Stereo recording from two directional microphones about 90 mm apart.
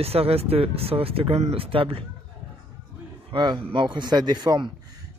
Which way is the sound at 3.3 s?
65° right (ahead or behind).